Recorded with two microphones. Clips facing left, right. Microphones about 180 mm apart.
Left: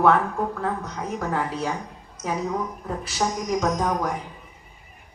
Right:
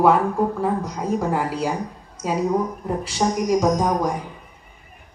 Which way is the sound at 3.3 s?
15° right (ahead or behind).